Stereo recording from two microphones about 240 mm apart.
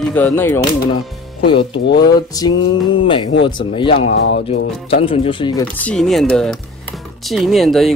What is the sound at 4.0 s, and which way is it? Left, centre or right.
Speech, left.